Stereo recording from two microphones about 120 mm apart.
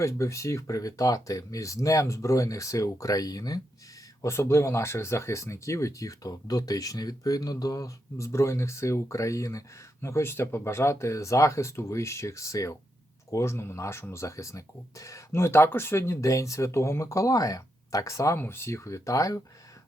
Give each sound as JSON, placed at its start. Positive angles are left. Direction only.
{"t": 0.0, "sound": "speech", "side_deg": 25}